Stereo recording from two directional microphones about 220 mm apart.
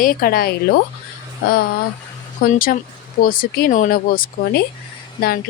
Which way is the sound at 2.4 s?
40° left (ahead or behind).